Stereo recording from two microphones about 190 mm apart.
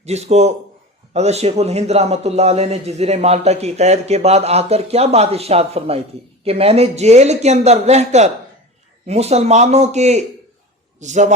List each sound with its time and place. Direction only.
0.0 s a man's voice: 35° right (ahead or behind)